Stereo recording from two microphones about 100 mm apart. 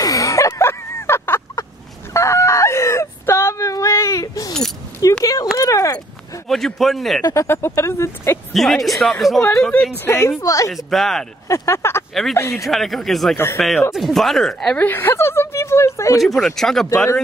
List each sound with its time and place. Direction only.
0.0 s a sound: 35° left (ahead or behind)
6.5 s speech: centre (ahead or behind)
7.2 s speech: 30° left (ahead or behind)
8.5 s speech: centre (ahead or behind)
9.6 s speech: 10° left (ahead or behind)
10.0 s speech: 25° left (ahead or behind)
10.7 s speech: centre (ahead or behind)
11.4 s speech: 30° left (ahead or behind)
12.1 s speech: centre (ahead or behind)
12.4 s speech: 30° left (ahead or behind)
12.6 s speech: centre (ahead or behind)
14.8 s a sound: 20° left (ahead or behind)
16.2 s speech: centre (ahead or behind)